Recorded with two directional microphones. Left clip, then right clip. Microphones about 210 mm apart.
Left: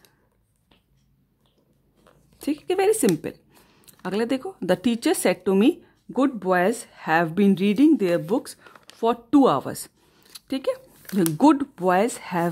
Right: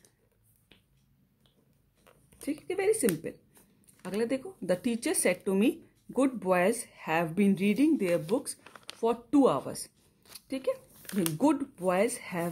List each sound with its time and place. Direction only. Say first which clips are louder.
2.4 s speech: left 8 dB; 40° left (ahead or behind)